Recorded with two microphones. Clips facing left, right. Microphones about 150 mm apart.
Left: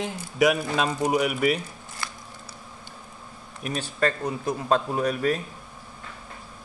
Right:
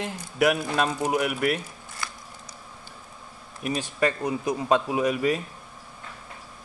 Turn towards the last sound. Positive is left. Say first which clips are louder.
# right 1 dB
turn(degrees=-5)  # may be behind; listen again after turning